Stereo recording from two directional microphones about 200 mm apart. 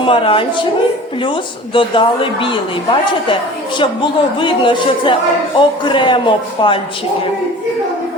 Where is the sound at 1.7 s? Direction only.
25° left (ahead or behind).